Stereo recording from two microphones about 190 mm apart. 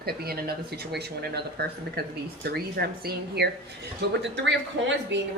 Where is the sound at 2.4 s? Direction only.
55° right (ahead or behind).